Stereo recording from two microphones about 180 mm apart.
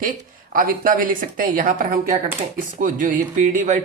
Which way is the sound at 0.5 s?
50° right (ahead or behind).